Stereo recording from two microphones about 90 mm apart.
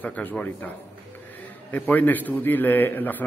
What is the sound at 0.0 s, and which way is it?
Speech, 20° left (ahead or behind).